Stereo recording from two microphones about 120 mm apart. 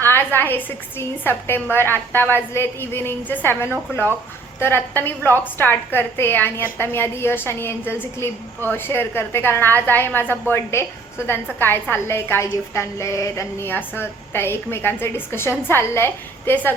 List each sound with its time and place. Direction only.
0.0 s a woman's voice: 15° left (ahead or behind)